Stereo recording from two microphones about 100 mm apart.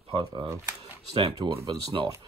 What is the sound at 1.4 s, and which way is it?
Speech, 50° right (ahead or behind).